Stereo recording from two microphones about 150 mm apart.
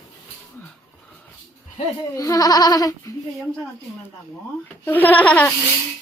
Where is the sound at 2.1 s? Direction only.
25° left (ahead or behind).